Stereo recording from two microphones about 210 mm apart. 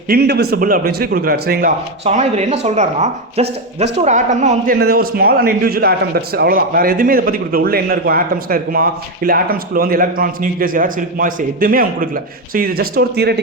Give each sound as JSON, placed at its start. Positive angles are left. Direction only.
{"t": 0.1, "sound": "a man's voice", "side_deg": -50}
{"t": 2.0, "sound": "a man's voice", "side_deg": -30}